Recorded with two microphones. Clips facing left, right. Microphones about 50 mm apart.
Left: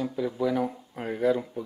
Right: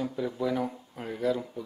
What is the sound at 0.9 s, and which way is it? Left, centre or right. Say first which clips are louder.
Speech: left 4 dB; centre.